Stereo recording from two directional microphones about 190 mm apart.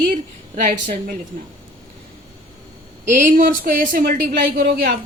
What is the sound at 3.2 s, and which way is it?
A woman's voice, 45° right (ahead or behind).